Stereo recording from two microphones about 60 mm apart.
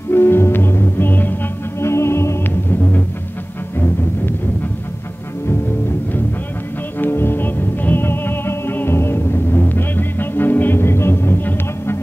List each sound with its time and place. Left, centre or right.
0.1 s music: left
1.8 s music: left
7.0 s music: left